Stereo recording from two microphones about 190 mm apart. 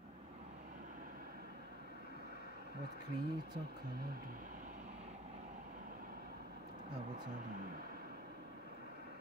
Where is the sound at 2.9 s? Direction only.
55° right (ahead or behind); by 5.4 s 35° right (ahead or behind).